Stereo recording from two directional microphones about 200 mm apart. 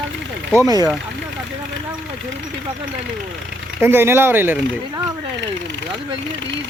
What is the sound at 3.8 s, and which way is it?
Speech, 10° right (ahead or behind).